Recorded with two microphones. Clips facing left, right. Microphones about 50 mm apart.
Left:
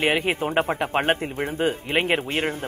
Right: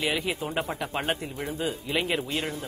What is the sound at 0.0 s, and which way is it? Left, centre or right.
A man's voice, left.